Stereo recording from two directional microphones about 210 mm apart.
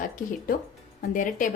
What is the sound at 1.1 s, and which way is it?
Speech, 40° left (ahead or behind).